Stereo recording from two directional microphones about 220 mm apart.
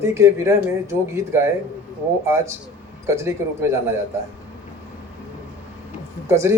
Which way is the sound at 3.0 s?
10° right (ahead or behind).